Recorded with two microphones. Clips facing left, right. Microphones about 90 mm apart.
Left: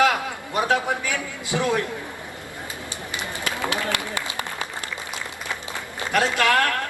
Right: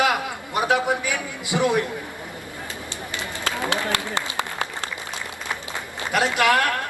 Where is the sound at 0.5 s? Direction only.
15° right (ahead or behind).